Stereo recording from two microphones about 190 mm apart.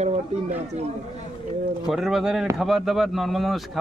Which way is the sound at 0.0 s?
35° right (ahead or behind).